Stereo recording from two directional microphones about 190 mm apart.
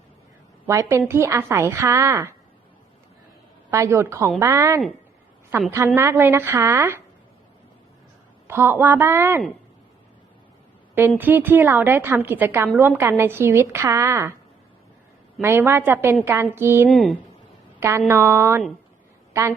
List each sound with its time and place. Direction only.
0.7 s a woman's voice: 15° right (ahead or behind)
3.7 s a woman's voice: 15° right (ahead or behind)
6.0 s a woman's voice: 15° right (ahead or behind)
8.4 s a woman's voice: 10° right (ahead or behind)
11.2 s a woman's voice: 10° right (ahead or behind)
15.4 s a woman's voice: 10° right (ahead or behind)
16.9 s speech: centre (ahead or behind)
17.7 s a woman's voice: 15° right (ahead or behind)